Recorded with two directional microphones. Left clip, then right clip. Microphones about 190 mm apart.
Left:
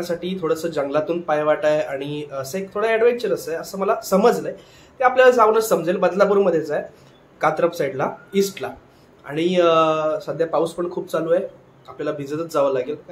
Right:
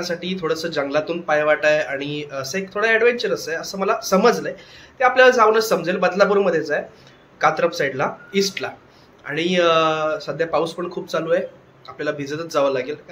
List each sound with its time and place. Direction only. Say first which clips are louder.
0.1 s a man's voice: left 3 dB; 5° left (ahead or behind)